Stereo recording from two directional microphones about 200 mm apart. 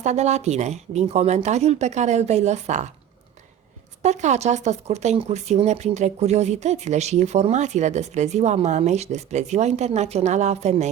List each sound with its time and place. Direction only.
0.0 s speech: 35° right (ahead or behind)
4.0 s speech: 35° right (ahead or behind)